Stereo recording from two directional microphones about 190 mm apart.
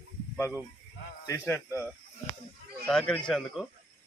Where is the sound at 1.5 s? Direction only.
10° left (ahead or behind).